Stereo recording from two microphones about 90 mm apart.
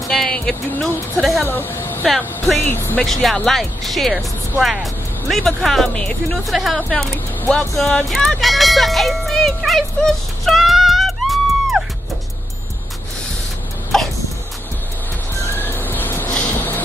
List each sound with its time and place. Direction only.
0.1 s speech: 5° left (ahead or behind)
1.5 s speech: 25° left (ahead or behind)
2.0 s speech: centre (ahead or behind)
2.6 s speech: 25° left (ahead or behind)
3.0 s speech: 5° left (ahead or behind)
13.9 s a sound: 5° left (ahead or behind)
15.4 s music: 25° left (ahead or behind)